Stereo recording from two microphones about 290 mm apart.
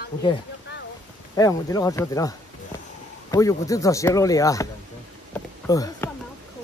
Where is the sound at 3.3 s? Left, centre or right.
Centre.